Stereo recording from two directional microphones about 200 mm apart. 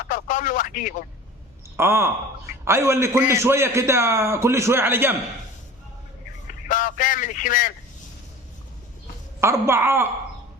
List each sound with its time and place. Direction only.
0.1 s telephone: 40° left (ahead or behind)
1.7 s a man's voice: 10° right (ahead or behind)
6.7 s a sound: 40° left (ahead or behind)
9.4 s a man's voice: 15° right (ahead or behind)